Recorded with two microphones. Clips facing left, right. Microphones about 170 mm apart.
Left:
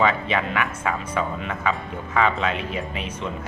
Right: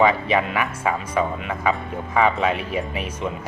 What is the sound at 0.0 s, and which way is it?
Speech, 10° right (ahead or behind).